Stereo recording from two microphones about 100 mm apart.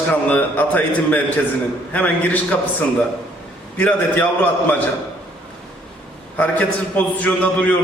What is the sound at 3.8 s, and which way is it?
Speech, 15° left (ahead or behind).